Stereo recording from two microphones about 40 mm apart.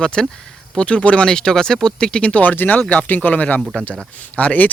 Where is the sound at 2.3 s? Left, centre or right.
Left.